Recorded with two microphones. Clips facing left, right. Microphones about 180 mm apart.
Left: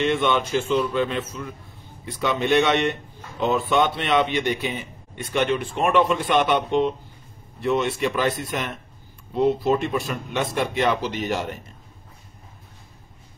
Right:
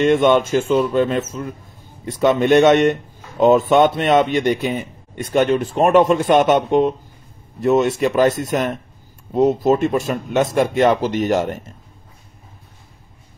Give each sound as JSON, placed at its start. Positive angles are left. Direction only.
{"t": 0.0, "sound": "speech", "side_deg": -45}